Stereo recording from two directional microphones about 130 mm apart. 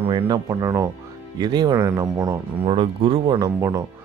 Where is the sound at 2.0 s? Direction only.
25° right (ahead or behind).